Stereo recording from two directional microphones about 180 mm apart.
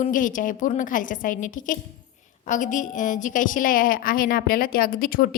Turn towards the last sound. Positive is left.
turn(degrees=50)  # may be behind; listen again after turning